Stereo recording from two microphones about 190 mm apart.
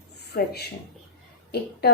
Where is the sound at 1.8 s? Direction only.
55° left (ahead or behind).